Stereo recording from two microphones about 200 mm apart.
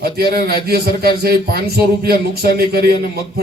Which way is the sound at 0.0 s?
50° right (ahead or behind).